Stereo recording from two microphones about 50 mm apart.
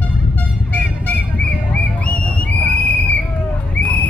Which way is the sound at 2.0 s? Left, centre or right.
Left.